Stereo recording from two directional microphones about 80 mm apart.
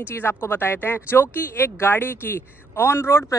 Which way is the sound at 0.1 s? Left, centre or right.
Left.